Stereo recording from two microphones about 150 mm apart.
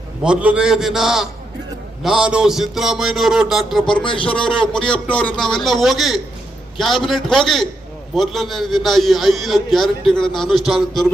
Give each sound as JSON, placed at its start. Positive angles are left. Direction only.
{"t": 0.2, "sound": "a man's voice", "side_deg": -5}
{"t": 4.0, "sound": "a man's voice", "side_deg": 35}
{"t": 4.4, "sound": "a man's voice", "side_deg": 5}